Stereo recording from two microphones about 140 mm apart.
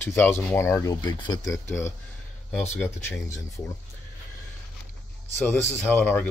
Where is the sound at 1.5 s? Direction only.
20° left (ahead or behind).